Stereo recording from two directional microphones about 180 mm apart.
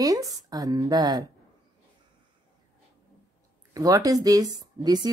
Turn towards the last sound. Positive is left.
turn(degrees=-20)  # may be behind; listen again after turning